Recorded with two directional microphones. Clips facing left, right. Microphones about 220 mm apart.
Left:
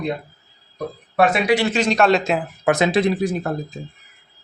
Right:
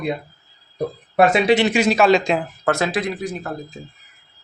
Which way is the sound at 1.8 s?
5° right (ahead or behind).